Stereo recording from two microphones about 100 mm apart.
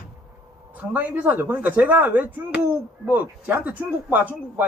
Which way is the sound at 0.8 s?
15° right (ahead or behind).